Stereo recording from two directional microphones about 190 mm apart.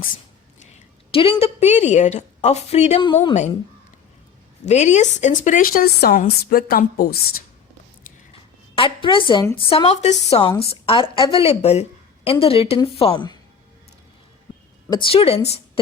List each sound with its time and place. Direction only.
1.4 s a woman's voice: 35° left (ahead or behind)
4.6 s speech: 35° left (ahead or behind); by 7.4 s 55° left (ahead or behind)
8.7 s a woman's voice: 25° left (ahead or behind)
14.8 s a woman's voice: 25° left (ahead or behind)